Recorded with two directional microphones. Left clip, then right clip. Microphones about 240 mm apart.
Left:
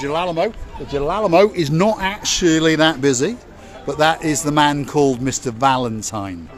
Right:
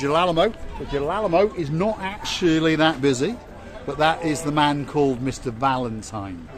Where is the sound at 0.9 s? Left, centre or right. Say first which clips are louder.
Left 5 dB; left.